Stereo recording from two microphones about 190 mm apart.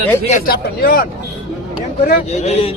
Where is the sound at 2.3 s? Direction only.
35° left (ahead or behind).